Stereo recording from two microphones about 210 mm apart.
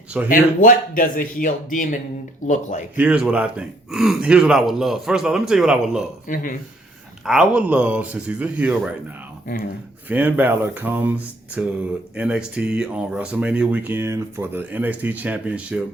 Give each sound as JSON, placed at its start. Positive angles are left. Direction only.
{"t": 0.3, "sound": "speech", "side_deg": 40}
{"t": 3.0, "sound": "speech", "side_deg": -5}
{"t": 6.2, "sound": "speech", "side_deg": 40}
{"t": 7.3, "sound": "speech", "side_deg": -5}
{"t": 10.1, "sound": "speech", "side_deg": -10}